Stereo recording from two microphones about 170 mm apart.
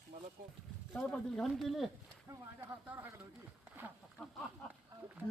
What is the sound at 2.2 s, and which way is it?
Speech, 10° right (ahead or behind).